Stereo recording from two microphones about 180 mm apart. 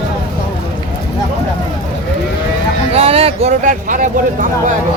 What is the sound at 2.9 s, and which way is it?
Speech, 35° right (ahead or behind).